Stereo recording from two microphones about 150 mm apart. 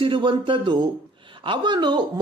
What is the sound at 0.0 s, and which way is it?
A man's voice, 35° right (ahead or behind).